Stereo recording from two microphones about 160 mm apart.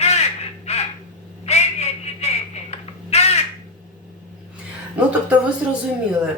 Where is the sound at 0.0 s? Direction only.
40° left (ahead or behind).